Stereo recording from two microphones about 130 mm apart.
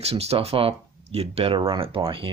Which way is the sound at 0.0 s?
50° right (ahead or behind).